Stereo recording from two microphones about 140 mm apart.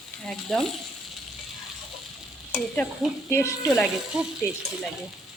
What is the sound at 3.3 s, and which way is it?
Speech, 20° left (ahead or behind).